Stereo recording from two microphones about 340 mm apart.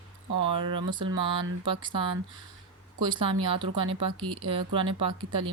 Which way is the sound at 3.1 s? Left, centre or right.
Centre.